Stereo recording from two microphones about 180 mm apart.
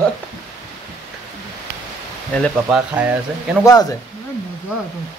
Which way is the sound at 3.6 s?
20° left (ahead or behind).